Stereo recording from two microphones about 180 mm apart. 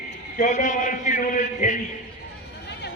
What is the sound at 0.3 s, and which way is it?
A man's voice, 45° left (ahead or behind).